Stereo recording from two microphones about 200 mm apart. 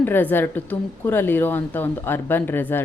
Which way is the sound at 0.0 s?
10° left (ahead or behind).